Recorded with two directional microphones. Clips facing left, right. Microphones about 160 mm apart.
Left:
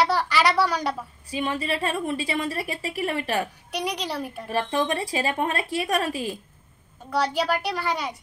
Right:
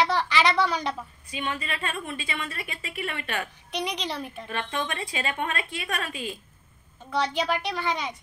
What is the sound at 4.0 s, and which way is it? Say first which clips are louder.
Speech: left 3 dB; 10° left (ahead or behind).